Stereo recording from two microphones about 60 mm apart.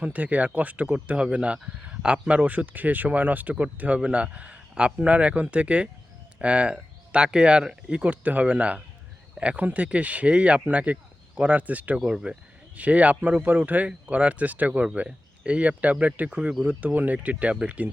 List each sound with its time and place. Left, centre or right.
0.0 s speech: right
11.9 s speech: centre
12.7 s speech: right